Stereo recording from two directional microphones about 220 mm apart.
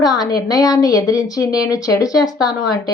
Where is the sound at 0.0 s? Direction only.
15° left (ahead or behind).